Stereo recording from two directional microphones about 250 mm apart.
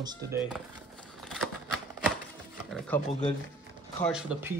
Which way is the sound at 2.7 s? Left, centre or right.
Centre.